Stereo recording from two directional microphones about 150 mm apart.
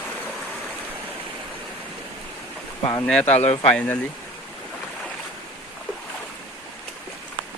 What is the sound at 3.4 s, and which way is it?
Speech, 45° left (ahead or behind).